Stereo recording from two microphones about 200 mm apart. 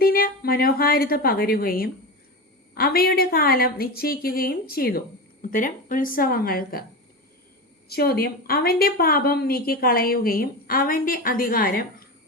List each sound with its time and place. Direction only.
0.0 s a woman's voice: 50° left (ahead or behind)
7.9 s a woman's voice: 50° left (ahead or behind)